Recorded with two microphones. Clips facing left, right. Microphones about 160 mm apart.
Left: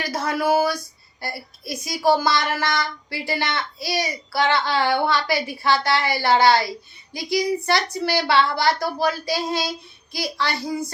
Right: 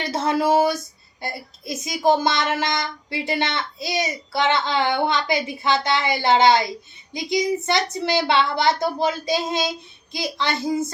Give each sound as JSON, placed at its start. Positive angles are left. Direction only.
{"t": 0.0, "sound": "speech", "side_deg": -25}